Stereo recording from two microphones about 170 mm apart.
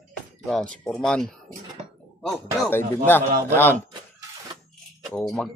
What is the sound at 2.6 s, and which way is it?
Speech, 10° left (ahead or behind).